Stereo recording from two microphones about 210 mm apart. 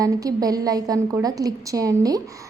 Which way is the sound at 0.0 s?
15° right (ahead or behind).